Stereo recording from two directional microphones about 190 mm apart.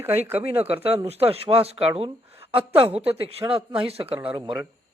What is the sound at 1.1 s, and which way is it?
Speech, 30° right (ahead or behind).